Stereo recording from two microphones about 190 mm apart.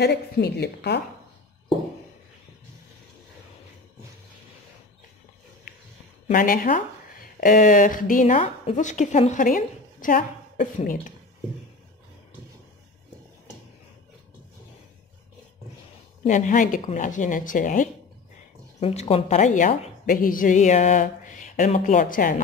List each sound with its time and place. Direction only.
0.0 s a woman's voice: 60° left (ahead or behind)
6.3 s a woman's voice: 45° left (ahead or behind)
16.3 s speech: 40° left (ahead or behind)
18.8 s a woman's voice: 30° left (ahead or behind)